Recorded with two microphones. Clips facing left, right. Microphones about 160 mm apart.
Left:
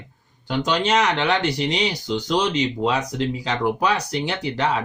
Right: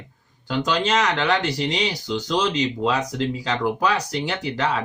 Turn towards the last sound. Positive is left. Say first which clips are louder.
# left 1 dB
turn(degrees=20)  # may be behind; listen again after turning